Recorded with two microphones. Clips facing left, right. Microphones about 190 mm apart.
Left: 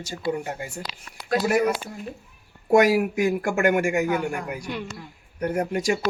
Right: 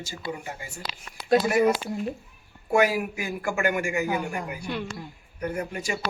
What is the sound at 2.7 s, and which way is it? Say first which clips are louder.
A man's voice: left 5 dB; 80° left.